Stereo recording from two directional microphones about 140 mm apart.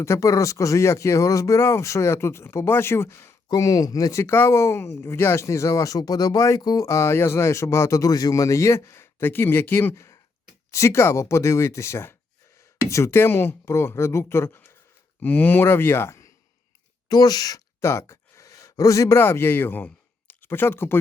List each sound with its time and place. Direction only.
0.0 s speech: 20° left (ahead or behind)